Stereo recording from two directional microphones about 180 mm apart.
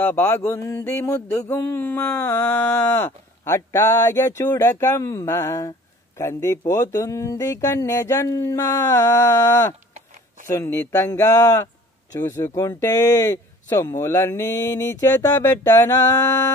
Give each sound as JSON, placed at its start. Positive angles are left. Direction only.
{"t": 0.0, "sound": "mantra", "side_deg": 10}